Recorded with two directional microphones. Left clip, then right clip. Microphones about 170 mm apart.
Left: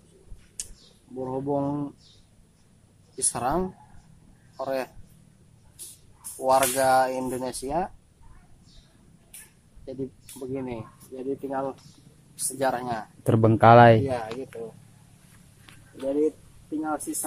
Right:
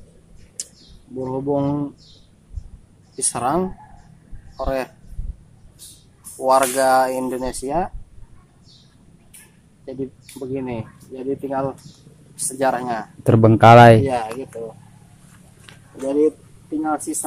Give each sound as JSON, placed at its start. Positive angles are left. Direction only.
{"t": 1.2, "sound": "speech", "side_deg": 0}
{"t": 3.2, "sound": "speech", "side_deg": -5}
{"t": 6.3, "sound": "speech", "side_deg": -5}
{"t": 9.8, "sound": "speech", "side_deg": 0}
{"t": 14.0, "sound": "speech", "side_deg": -25}
{"t": 16.1, "sound": "speech", "side_deg": -20}